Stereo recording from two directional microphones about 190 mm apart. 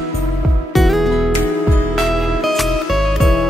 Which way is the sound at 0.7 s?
Centre (ahead or behind).